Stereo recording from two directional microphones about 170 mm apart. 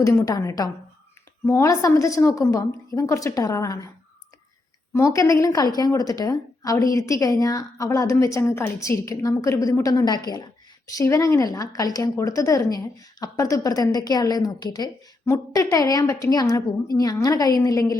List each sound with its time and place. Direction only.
0.0 s a woman's voice: 20° left (ahead or behind)
4.9 s a woman's voice: 20° left (ahead or behind)